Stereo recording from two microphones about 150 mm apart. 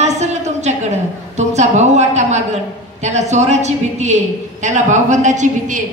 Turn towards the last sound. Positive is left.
turn(degrees=-55)  # may be behind; listen again after turning